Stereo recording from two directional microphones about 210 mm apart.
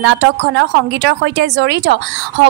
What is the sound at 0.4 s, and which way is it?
Speech, 55° right (ahead or behind).